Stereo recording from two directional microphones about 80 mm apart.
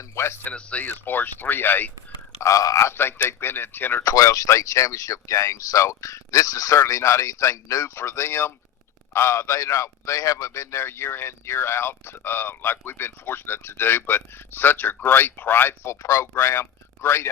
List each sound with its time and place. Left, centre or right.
0.0 s speech: left
0.5 s speech: centre
2.4 s speech: left
4.0 s a man's voice: left